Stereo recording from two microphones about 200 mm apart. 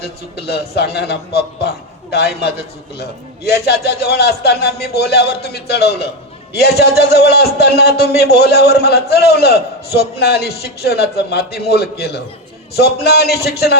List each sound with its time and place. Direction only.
0.0 s a man's voice: 55° left (ahead or behind)